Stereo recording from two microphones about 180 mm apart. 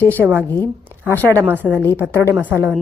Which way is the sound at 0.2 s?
10° right (ahead or behind).